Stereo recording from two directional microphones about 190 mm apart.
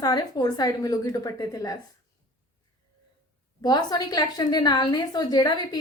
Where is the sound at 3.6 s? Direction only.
20° left (ahead or behind).